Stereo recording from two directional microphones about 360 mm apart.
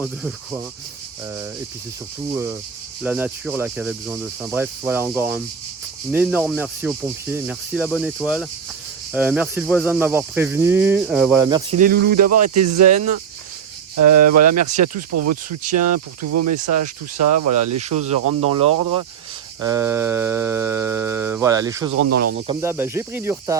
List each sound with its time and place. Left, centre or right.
0.0 s speech: centre
3.0 s speech: centre; by 12.3 s right
12.3 s speech: right
18.2 s speech: right
19.5 s mantra: centre
22.0 s speech: right
22.6 s mantra: centre